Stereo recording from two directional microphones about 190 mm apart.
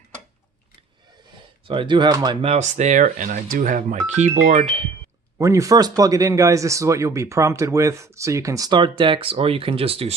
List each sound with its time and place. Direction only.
1.6 s speech: 25° right (ahead or behind)
5.4 s speech: 15° right (ahead or behind)